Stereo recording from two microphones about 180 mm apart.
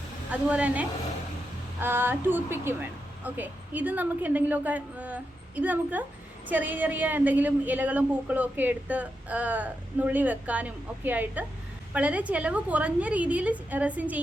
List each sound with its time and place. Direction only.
0.3 s a woman's voice: 5° right (ahead or behind)